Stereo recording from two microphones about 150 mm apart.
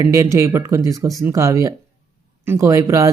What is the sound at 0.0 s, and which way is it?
Speech, 20° right (ahead or behind).